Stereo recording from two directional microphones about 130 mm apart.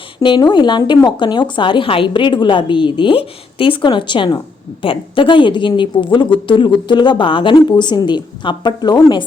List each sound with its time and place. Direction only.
0.2 s speech: 40° left (ahead or behind)